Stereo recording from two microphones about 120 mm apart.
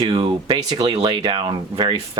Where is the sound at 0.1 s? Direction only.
40° right (ahead or behind).